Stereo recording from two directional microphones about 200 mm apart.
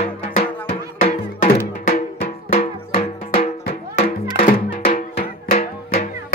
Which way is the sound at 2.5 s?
30° left (ahead or behind).